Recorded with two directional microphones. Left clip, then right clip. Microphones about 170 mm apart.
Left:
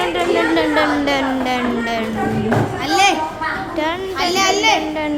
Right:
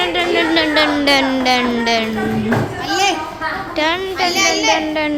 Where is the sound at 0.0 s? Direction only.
Centre (ahead or behind); by 2.0 s 20° right (ahead or behind).